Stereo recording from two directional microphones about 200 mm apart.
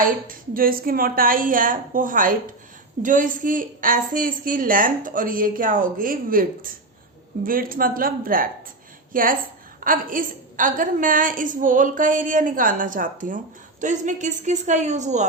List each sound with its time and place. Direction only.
0.0 s a woman's voice: 45° right (ahead or behind)